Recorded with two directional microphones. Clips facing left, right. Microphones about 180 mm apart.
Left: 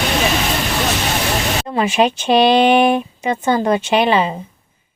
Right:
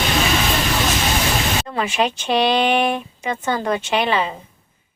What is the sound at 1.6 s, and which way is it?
Speech, 20° left (ahead or behind).